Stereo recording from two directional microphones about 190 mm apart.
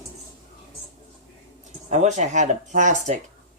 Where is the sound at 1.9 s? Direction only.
40° right (ahead or behind).